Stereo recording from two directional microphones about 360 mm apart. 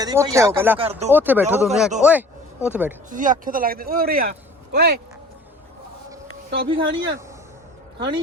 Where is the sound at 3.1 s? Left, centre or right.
Right.